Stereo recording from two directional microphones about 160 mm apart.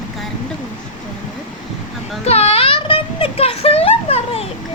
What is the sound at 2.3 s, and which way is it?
Speech, 40° left (ahead or behind).